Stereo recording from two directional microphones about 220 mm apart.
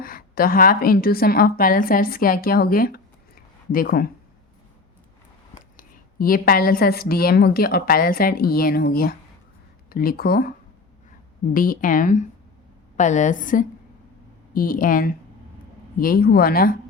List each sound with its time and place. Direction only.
0.0 s a woman's voice: 40° left (ahead or behind)
5.7 s a woman's voice: 40° left (ahead or behind)
11.5 s a woman's voice: 40° left (ahead or behind)